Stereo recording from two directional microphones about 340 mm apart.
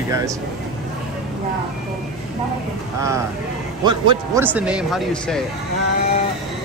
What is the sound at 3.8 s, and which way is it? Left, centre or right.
A man's voice, centre.